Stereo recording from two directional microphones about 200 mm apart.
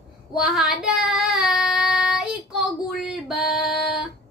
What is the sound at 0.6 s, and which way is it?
Child singing, centre (ahead or behind).